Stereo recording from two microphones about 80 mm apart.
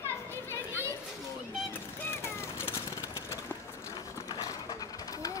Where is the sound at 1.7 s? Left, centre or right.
Left.